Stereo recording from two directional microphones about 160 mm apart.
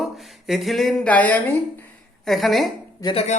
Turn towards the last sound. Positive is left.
turn(degrees=45)  # may be behind; listen again after turning